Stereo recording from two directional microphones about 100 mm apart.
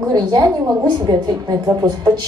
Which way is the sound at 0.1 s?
45° right (ahead or behind).